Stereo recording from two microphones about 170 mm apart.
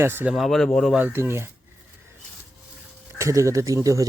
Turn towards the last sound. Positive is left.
turn(degrees=-20)  # may be behind; listen again after turning